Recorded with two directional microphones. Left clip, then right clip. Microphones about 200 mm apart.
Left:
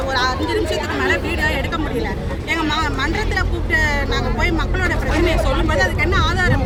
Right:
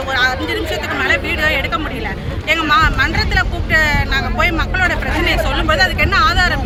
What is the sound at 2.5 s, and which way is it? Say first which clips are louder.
Speech: right 7 dB; 15° right (ahead or behind).